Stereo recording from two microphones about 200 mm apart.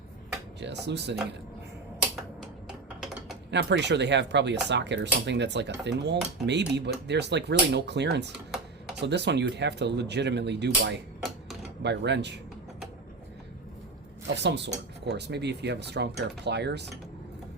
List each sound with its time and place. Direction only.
0.6 s speech: 60° right (ahead or behind)
2.4 s a sound: centre (ahead or behind)
3.5 s speech: 60° right (ahead or behind)
14.3 s speech: 60° right (ahead or behind)